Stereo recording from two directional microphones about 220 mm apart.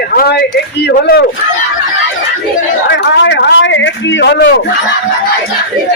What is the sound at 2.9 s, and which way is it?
Speech, 55° left (ahead or behind).